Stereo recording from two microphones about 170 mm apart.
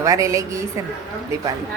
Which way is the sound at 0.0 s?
20° right (ahead or behind).